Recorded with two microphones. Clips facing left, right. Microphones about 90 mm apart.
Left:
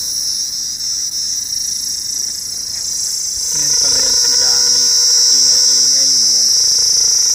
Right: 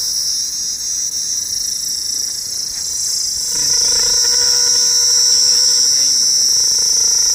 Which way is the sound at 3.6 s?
45° right (ahead or behind).